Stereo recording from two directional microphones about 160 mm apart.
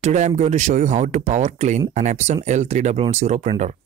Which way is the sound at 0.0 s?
50° right (ahead or behind).